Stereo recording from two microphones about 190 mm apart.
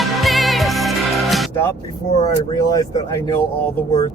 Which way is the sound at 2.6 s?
20° left (ahead or behind).